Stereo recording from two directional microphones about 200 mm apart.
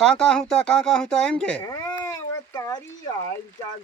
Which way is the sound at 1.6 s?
15° left (ahead or behind).